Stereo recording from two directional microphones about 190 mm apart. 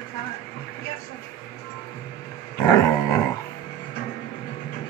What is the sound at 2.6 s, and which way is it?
Dog, 15° left (ahead or behind).